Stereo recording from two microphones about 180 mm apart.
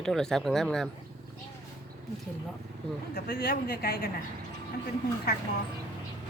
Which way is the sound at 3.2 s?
60° left (ahead or behind).